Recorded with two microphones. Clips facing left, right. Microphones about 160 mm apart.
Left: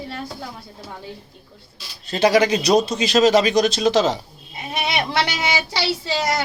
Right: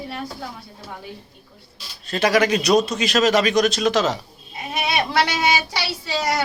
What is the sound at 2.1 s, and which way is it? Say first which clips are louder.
A man's voice: left 2 dB; 30° left (ahead or behind).